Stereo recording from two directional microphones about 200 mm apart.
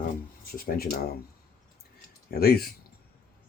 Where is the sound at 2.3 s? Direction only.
50° left (ahead or behind).